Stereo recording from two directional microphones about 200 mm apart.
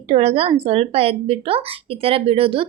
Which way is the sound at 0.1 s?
30° right (ahead or behind).